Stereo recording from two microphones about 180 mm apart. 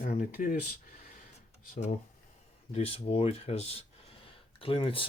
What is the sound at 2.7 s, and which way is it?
Speech, 35° left (ahead or behind).